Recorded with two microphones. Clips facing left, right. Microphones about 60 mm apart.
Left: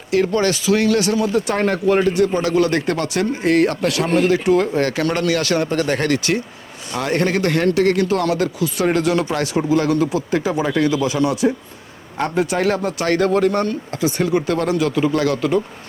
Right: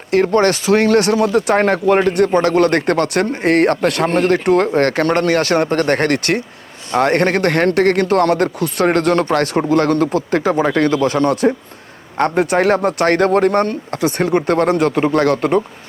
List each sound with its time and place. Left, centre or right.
0.1 s speech: right